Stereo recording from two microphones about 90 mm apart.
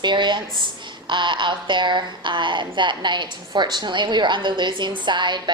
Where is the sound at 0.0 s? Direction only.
55° right (ahead or behind).